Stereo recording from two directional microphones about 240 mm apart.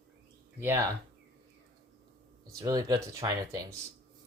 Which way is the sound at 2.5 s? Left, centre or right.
Centre.